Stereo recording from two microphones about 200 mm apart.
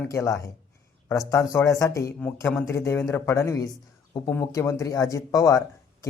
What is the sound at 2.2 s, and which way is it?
Speech, 5° left (ahead or behind).